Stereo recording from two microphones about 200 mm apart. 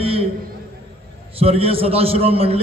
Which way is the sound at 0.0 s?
30° right (ahead or behind).